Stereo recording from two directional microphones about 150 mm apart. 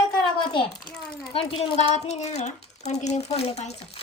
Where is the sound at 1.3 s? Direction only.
35° left (ahead or behind).